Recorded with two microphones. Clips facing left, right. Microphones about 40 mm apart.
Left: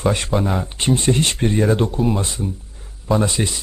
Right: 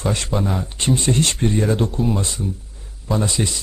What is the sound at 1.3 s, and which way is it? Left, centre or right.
Speech, centre.